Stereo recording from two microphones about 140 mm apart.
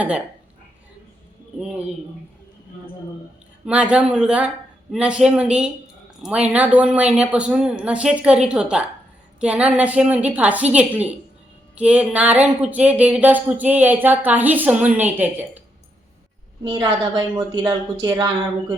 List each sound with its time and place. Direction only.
3.7 s speech: 10° right (ahead or behind)
16.6 s a woman's voice: 30° right (ahead or behind)